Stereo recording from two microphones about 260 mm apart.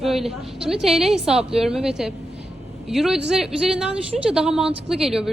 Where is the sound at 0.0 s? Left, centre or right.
Centre.